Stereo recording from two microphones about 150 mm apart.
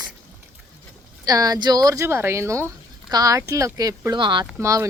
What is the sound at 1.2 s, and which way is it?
Speech, 25° right (ahead or behind).